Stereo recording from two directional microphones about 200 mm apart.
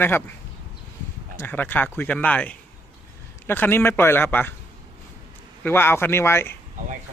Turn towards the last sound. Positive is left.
turn(degrees=10)  # may be behind; listen again after turning